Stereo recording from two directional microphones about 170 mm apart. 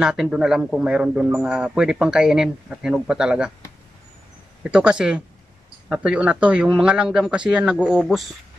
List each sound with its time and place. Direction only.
0.0 s a man's voice: 5° right (ahead or behind)
4.6 s a man's voice: 5° right (ahead or behind)